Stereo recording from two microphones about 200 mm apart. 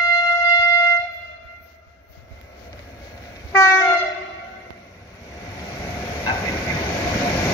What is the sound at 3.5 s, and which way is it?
Train, 15° left (ahead or behind).